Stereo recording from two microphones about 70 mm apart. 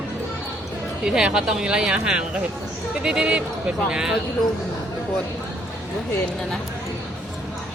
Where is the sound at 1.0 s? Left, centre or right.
Centre.